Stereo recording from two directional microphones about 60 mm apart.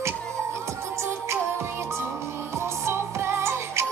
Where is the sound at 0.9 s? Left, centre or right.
Right.